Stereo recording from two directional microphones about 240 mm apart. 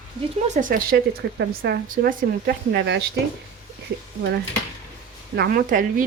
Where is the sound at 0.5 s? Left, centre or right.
Right.